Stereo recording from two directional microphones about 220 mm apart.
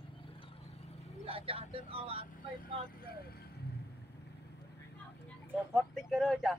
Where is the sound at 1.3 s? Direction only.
25° right (ahead or behind).